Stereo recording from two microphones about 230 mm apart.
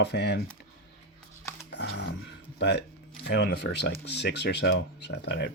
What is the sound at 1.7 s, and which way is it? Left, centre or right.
Music, left.